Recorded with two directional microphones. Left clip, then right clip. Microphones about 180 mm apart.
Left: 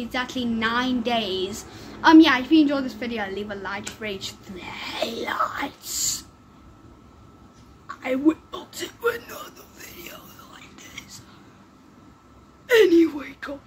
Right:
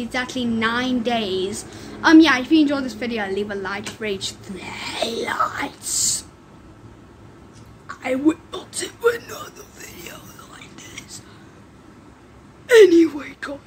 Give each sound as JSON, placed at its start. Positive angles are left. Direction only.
{"t": 0.0, "sound": "a woman's voice", "side_deg": 5}
{"t": 7.9, "sound": "a sound", "side_deg": 0}
{"t": 12.6, "sound": "speech", "side_deg": 0}